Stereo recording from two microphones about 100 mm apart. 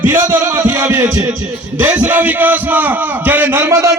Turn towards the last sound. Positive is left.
turn(degrees=-30)  # may be behind; listen again after turning